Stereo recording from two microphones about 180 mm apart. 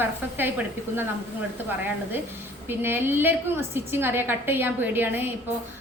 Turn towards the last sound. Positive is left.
turn(degrees=-10)  # may be behind; listen again after turning